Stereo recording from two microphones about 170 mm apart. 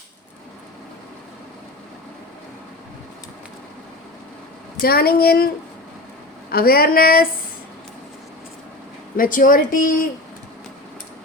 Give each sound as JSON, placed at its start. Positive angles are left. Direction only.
{"t": 4.8, "sound": "speech", "side_deg": 60}
{"t": 6.5, "sound": "speech", "side_deg": 60}
{"t": 9.1, "sound": "speech", "side_deg": 55}